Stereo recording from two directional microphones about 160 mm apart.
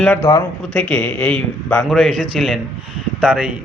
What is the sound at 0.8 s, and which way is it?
Speech, 10° left (ahead or behind).